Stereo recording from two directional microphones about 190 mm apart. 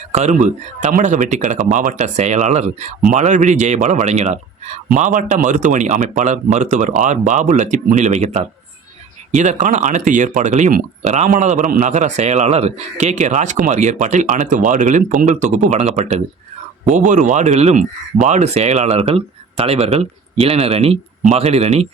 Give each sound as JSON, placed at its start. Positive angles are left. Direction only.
{"t": 0.1, "sound": "speech", "side_deg": -40}